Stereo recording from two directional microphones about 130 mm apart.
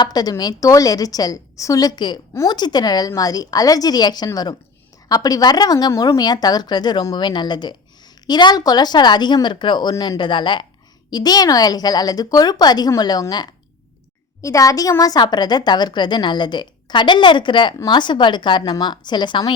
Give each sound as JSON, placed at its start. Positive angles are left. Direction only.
{"t": 0.0, "sound": "a woman's voice", "side_deg": 30}